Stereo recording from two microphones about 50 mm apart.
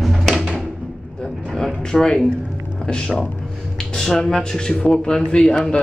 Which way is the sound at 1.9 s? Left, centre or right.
Centre.